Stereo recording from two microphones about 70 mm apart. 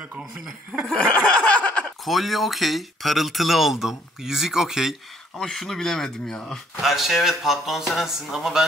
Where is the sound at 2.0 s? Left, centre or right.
Centre.